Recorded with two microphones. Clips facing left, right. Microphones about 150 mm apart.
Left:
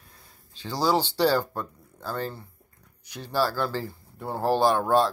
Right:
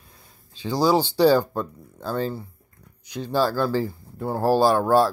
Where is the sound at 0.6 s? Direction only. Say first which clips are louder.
Right 4 dB; 15° right (ahead or behind).